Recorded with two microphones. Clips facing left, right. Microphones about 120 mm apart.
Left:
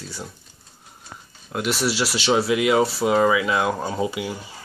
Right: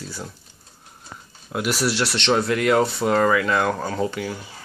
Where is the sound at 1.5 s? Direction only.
Centre (ahead or behind).